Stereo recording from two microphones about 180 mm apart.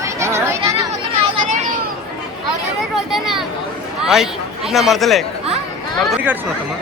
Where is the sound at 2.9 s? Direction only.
Centre (ahead or behind).